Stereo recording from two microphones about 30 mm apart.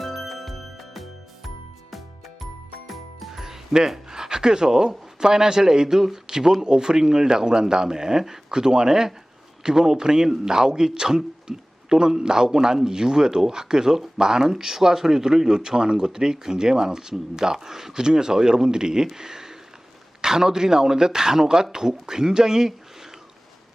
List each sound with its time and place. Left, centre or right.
0.0 s music: centre
2.4 s music: centre
3.4 s music: centre
4.1 s speech: right
17.9 s speech: right